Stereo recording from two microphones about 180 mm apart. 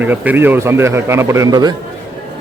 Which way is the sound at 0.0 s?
10° right (ahead or behind).